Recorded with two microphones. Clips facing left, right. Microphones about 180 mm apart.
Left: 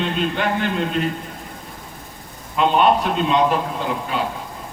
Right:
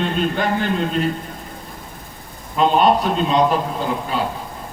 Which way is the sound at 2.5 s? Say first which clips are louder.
Right 1 dB; 40° right (ahead or behind).